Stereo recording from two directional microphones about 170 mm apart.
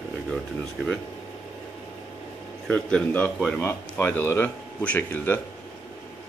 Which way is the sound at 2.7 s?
5° left (ahead or behind).